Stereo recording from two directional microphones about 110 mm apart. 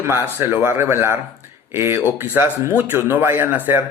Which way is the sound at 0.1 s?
25° right (ahead or behind).